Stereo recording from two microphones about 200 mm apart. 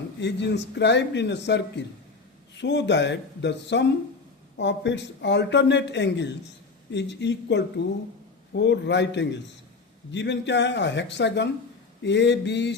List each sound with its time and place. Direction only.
0.2 s a man's voice: 60° left (ahead or behind)